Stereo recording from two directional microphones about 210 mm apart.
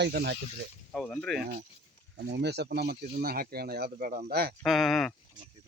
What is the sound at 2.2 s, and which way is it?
Speech, 55° right (ahead or behind).